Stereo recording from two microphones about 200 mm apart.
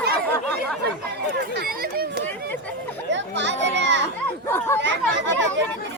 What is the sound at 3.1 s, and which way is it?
Chatter, 60° right (ahead or behind).